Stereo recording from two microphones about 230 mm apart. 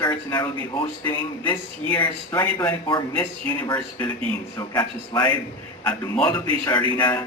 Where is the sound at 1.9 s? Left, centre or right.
Centre.